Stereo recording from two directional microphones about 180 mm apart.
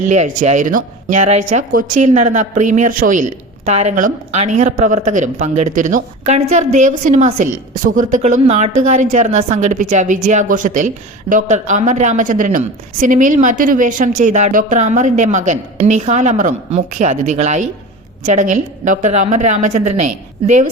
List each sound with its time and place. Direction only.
0.0 s speech: 40° right (ahead or behind)